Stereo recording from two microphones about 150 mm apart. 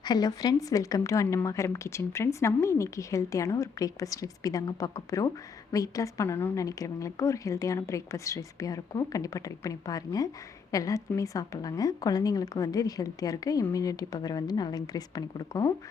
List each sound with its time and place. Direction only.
0.0 s a woman's voice: 25° left (ahead or behind)